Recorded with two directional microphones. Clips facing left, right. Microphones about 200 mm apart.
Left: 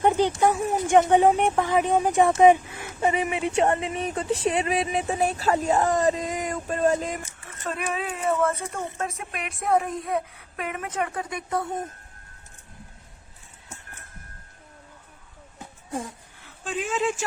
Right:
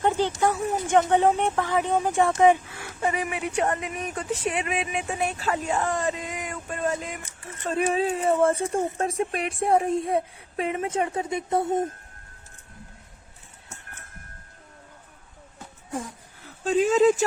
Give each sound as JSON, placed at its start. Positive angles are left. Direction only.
{"t": 0.0, "sound": "speech", "side_deg": 15}
{"t": 7.4, "sound": "speech", "side_deg": -30}
{"t": 16.4, "sound": "speech", "side_deg": -40}